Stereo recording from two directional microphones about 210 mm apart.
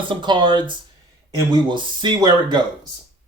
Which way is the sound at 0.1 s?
20° right (ahead or behind).